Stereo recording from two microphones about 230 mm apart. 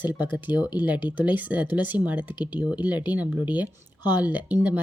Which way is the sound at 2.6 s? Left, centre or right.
Centre.